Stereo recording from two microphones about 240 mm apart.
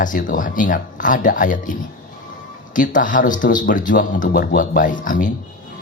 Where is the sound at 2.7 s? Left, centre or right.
Left.